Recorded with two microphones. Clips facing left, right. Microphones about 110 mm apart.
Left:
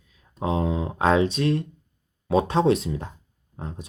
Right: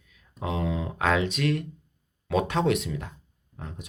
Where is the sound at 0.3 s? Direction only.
35° left (ahead or behind).